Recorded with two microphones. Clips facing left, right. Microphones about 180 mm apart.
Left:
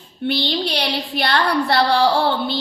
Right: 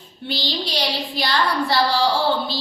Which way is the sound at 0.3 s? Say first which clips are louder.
Left 5 dB; 60° left (ahead or behind).